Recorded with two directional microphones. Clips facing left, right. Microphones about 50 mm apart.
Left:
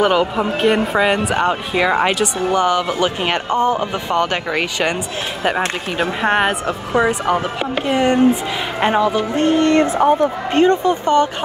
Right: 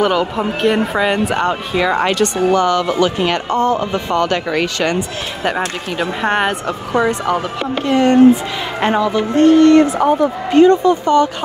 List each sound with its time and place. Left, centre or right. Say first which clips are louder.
0.0 s speech: even; centre
6.2 s speech: even; centre; by 11.2 s left